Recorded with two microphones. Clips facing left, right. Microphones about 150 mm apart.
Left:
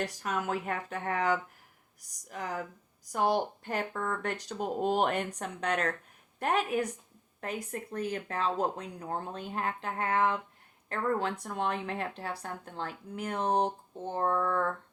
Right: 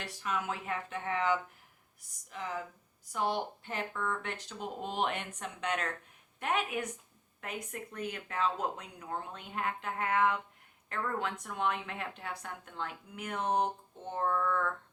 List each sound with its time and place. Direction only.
0.0 s speech: 45° left (ahead or behind)